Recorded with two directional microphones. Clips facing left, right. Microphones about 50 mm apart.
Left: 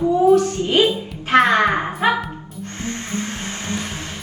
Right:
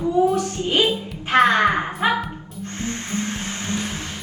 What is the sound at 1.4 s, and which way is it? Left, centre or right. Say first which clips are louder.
Speech: left 1 dB; left.